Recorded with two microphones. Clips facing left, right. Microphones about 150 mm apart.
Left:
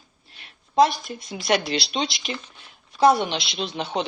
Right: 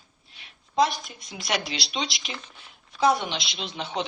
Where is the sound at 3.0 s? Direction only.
60° left (ahead or behind).